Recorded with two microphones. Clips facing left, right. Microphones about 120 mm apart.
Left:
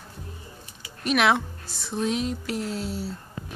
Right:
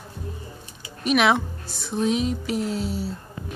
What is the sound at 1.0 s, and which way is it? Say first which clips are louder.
A woman's voice: right 2 dB; 5° right (ahead or behind).